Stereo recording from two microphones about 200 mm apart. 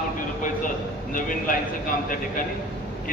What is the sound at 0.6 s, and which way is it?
Speech, 40° left (ahead or behind).